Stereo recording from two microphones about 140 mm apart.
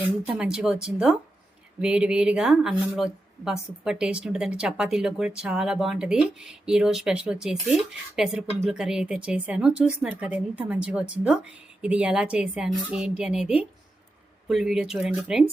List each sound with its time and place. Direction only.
0.3 s a woman's voice: 5° right (ahead or behind)